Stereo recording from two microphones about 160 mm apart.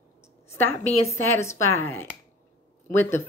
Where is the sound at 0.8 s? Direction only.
45° left (ahead or behind).